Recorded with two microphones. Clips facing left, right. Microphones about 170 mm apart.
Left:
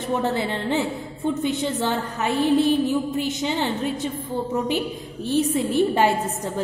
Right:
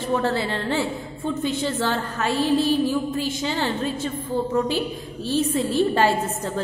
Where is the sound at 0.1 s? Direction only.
20° left (ahead or behind).